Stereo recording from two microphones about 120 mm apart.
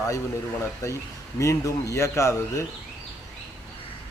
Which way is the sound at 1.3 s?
25° left (ahead or behind).